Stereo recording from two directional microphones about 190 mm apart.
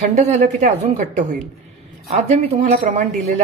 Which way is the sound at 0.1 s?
35° right (ahead or behind).